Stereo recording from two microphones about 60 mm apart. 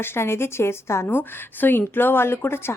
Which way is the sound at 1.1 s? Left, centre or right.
Left.